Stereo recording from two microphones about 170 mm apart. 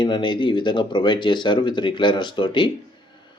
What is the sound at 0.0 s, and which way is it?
Speech, 30° left (ahead or behind).